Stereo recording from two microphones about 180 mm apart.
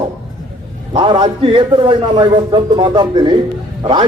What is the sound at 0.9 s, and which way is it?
A man's voice, 25° right (ahead or behind).